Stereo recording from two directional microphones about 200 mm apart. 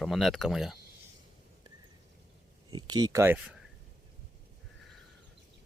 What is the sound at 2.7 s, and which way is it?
Speech, 20° right (ahead or behind).